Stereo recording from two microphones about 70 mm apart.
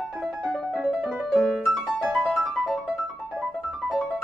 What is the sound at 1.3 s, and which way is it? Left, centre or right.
Music, centre.